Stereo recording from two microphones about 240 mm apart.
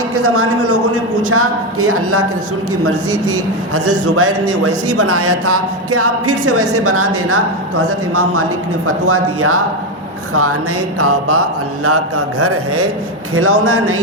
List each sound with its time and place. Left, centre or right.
0.2 s a woman's voice: right
3.8 s a woman's voice: right
9.0 s a man's voice: right
11.9 s a woman's voice: right